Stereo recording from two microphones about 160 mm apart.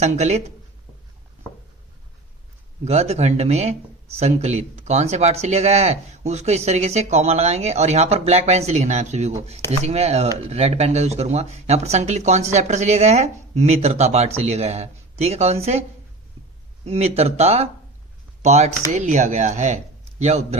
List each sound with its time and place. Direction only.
0.0 s speech: 45° right (ahead or behind)
2.8 s speech: 40° right (ahead or behind)
16.8 s speech: 40° right (ahead or behind)